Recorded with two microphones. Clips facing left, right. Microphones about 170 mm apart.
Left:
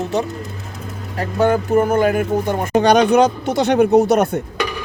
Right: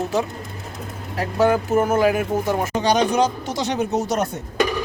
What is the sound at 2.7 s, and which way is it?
Speech, 60° left (ahead or behind).